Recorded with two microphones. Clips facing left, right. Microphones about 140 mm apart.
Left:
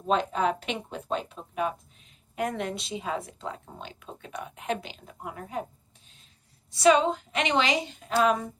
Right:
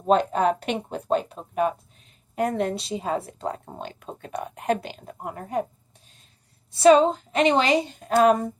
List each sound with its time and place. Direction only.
0.1 s speech: 45° right (ahead or behind)
6.7 s speech: 40° right (ahead or behind)